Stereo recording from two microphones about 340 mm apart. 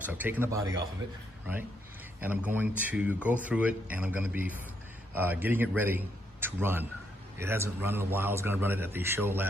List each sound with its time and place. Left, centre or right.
0.0 s a man's voice: centre
2.1 s a man's voice: centre